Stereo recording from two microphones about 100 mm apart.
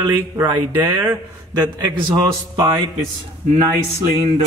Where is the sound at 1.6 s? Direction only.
50° right (ahead or behind).